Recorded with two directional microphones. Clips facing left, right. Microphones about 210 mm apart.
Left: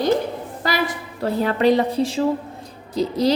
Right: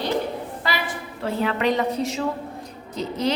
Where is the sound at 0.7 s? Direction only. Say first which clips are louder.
Left 6 dB; 40° left (ahead or behind).